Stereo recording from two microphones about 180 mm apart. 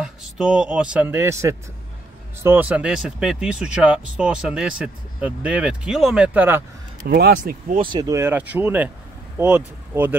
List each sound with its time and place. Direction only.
0.0 s a man's voice: 5° right (ahead or behind)
7.1 s speech: 60° right (ahead or behind)
7.7 s speech: 25° right (ahead or behind); by 8.9 s 10° right (ahead or behind)